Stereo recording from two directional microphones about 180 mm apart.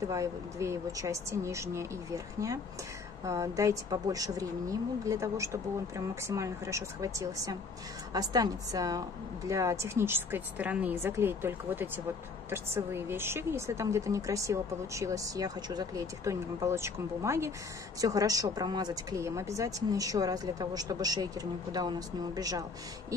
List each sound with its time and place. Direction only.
0.1 s speech: 15° right (ahead or behind)